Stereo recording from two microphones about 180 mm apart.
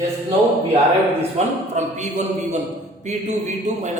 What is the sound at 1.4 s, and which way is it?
A man's voice, 40° right (ahead or behind).